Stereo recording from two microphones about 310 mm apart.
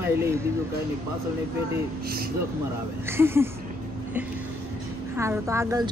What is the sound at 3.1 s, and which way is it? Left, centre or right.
Speech, centre.